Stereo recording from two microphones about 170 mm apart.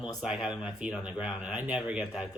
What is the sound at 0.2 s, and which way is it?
Speech, 5° right (ahead or behind).